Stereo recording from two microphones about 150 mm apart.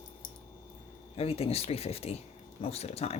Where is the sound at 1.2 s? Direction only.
40° left (ahead or behind).